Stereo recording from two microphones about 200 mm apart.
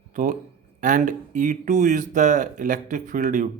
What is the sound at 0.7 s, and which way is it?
Speech, 40° right (ahead or behind).